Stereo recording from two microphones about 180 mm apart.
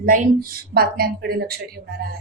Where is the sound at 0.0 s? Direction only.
55° right (ahead or behind).